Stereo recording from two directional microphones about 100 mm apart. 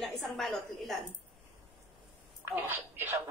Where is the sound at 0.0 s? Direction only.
Centre (ahead or behind).